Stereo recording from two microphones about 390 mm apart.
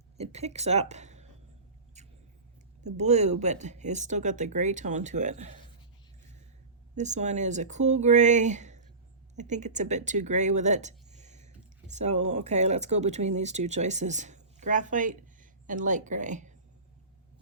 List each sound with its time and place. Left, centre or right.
0.2 s speech: centre
2.0 s a sound: centre
2.8 s speech: centre
6.9 s speech: centre